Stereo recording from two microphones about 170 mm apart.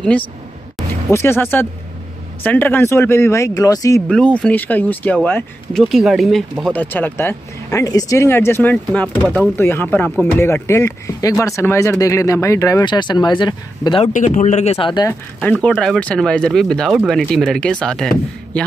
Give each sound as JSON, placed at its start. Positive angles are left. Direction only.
{"t": 1.1, "sound": "speech", "side_deg": 15}
{"t": 4.1, "sound": "speech", "side_deg": 5}
{"t": 6.6, "sound": "speech", "side_deg": 10}
{"t": 14.0, "sound": "speech", "side_deg": 45}
{"t": 15.0, "sound": "speech", "side_deg": 5}